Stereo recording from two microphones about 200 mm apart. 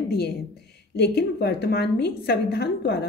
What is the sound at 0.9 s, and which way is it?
A woman's voice, 55° left (ahead or behind).